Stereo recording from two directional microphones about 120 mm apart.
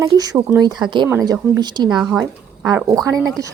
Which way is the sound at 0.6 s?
40° right (ahead or behind).